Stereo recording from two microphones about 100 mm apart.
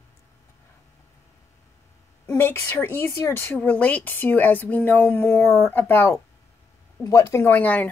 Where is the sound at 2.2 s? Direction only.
25° left (ahead or behind).